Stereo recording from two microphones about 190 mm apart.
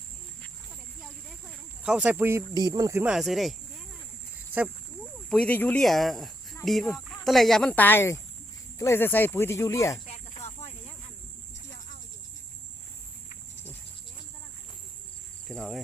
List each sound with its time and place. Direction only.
1.0 s speech: centre (ahead or behind)
5.0 s speech: 5° left (ahead or behind)
10.1 s snake: 35° left (ahead or behind)
15.4 s cricket: centre (ahead or behind)